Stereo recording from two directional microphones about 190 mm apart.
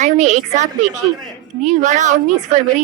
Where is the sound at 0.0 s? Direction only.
40° right (ahead or behind).